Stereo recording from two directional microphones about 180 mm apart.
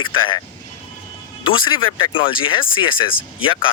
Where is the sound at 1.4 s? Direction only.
25° left (ahead or behind).